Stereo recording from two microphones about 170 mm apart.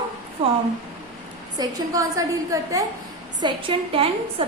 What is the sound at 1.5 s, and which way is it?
A woman's voice, 20° right (ahead or behind).